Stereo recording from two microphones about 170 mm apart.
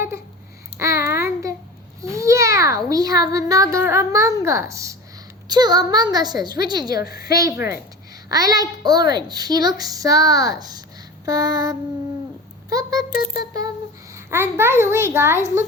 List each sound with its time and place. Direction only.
0.8 s child singing: 15° right (ahead or behind)
2.0 s a child's voice: 20° right (ahead or behind)
7.1 s a woman's voice: 65° left (ahead or behind)
7.3 s a child's voice: 20° right (ahead or behind)
14.3 s a child's voice: 15° right (ahead or behind)